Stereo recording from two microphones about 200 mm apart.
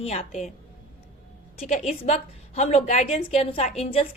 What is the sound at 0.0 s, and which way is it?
Speech, 30° left (ahead or behind).